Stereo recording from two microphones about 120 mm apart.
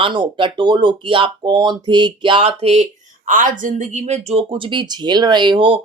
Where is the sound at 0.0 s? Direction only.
45° right (ahead or behind).